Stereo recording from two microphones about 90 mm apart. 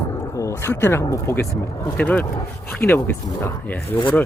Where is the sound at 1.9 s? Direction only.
15° left (ahead or behind).